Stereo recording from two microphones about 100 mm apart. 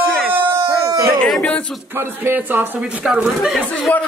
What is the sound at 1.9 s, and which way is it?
Speech, 20° right (ahead or behind).